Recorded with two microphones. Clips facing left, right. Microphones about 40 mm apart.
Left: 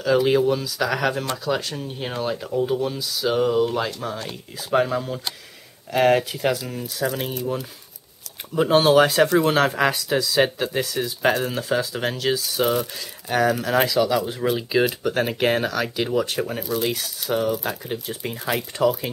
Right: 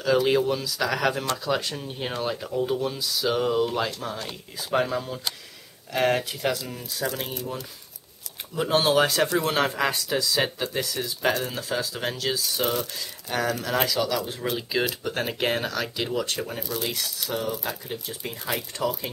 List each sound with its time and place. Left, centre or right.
0.0 s speech: centre
8.5 s speech: centre
11.2 s speech: centre
17.3 s speech: left